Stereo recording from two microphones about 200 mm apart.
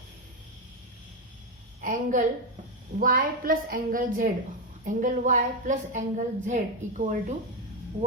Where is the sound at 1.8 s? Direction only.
40° right (ahead or behind).